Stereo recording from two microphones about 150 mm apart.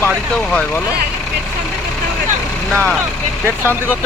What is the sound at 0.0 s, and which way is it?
Speech, 5° left (ahead or behind).